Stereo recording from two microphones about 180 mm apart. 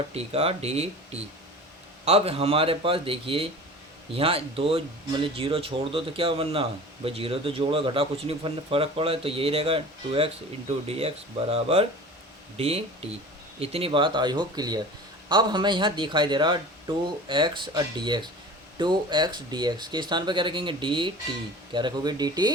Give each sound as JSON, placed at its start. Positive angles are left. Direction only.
{"t": 0.1, "sound": "speech", "side_deg": -35}